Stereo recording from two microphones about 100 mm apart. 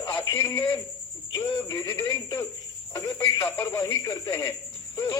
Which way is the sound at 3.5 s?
25° left (ahead or behind).